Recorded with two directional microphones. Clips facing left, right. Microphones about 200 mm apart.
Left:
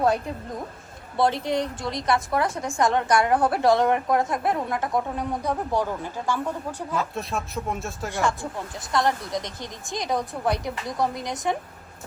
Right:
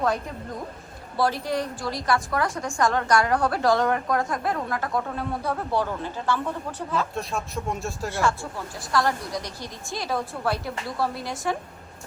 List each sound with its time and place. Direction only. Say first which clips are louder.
1.1 s a woman's voice: left 2 dB; 25° left (ahead or behind)
7.1 s speech: even; centre (ahead or behind)
8.1 s a woman's voice: left 1 dB; 15° left (ahead or behind)